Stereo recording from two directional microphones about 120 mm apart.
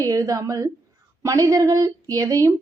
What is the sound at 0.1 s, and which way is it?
Speech, 30° right (ahead or behind).